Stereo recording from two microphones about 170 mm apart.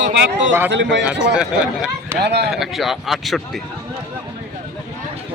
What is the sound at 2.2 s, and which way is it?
Speech, 75° right (ahead or behind).